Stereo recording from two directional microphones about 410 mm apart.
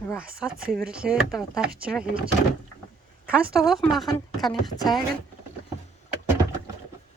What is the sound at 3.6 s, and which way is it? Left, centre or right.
A woman's voice, centre.